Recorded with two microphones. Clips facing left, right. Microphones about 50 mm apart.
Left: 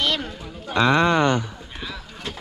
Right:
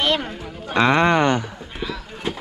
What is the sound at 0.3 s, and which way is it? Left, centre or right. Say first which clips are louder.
A man's voice: right 2 dB; right.